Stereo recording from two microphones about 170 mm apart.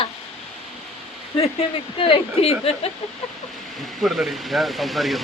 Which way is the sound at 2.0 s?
35° left (ahead or behind).